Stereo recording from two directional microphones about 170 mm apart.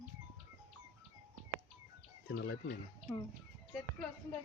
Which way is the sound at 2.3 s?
75° left (ahead or behind).